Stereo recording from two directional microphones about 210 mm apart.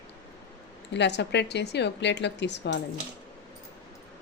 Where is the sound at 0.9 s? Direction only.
55° left (ahead or behind).